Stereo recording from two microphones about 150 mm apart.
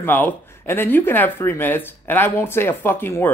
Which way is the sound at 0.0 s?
15° left (ahead or behind).